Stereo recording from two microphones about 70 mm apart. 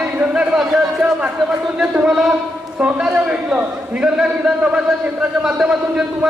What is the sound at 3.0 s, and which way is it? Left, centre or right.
A man's voice, centre.